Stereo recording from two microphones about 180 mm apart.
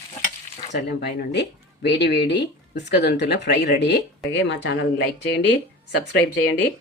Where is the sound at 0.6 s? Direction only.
55° left (ahead or behind).